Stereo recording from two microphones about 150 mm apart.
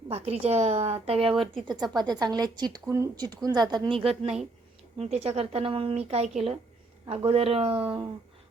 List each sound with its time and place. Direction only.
0.1 s a woman's voice: 45° right (ahead or behind)
1.5 s a woman's voice: 30° right (ahead or behind)